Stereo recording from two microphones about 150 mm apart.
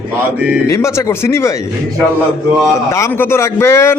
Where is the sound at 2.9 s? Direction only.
20° left (ahead or behind).